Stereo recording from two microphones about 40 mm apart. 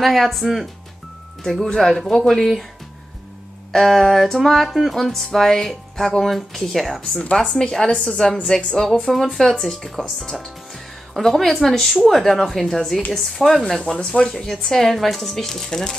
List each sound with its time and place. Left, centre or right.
0.0 s speech: centre
1.4 s speech: centre
3.7 s a woman's voice: centre; by 8.7 s left
8.7 s speech: centre
9.0 s speech: centre